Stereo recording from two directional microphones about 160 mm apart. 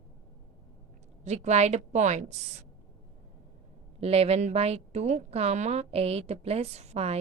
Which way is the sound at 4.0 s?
40° right (ahead or behind).